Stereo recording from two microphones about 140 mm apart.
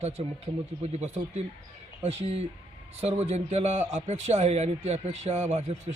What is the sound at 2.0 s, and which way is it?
A man's voice, 50° right (ahead or behind).